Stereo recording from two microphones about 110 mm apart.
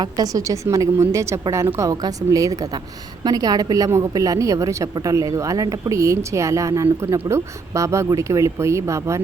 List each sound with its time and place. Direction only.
0.0 s a woman's voice: 35° right (ahead or behind)